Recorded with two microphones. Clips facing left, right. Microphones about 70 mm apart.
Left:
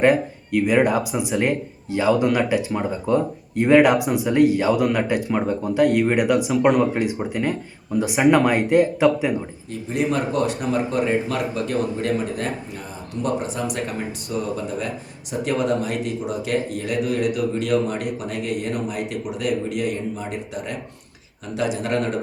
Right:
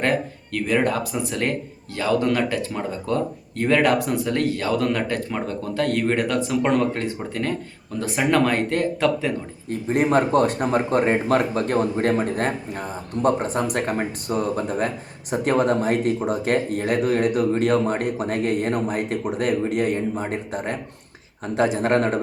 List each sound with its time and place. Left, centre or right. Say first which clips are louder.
0.0 s speech: left 5 dB; centre
9.6 s speech: right 3 dB; right